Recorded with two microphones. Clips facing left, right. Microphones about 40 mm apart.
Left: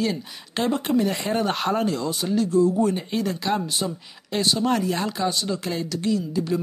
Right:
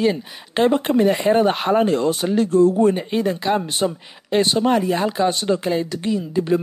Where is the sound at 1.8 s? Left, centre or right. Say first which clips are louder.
Right 6 dB; right.